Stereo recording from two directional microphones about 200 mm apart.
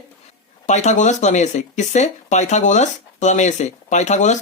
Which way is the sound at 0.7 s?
35° left (ahead or behind).